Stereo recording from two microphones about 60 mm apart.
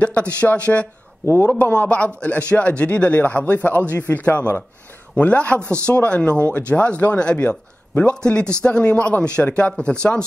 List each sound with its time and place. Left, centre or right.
0.0 s a man's voice: left